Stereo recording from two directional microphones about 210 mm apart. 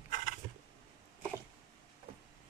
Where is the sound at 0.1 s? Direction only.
40° right (ahead or behind).